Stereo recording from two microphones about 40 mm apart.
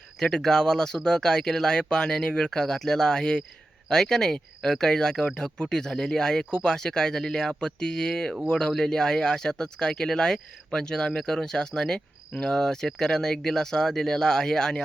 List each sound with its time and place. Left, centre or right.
0.2 s speech: centre